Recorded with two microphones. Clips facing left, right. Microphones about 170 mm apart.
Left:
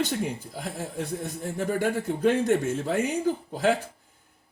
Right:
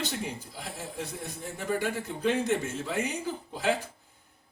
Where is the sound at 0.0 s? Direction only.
50° left (ahead or behind).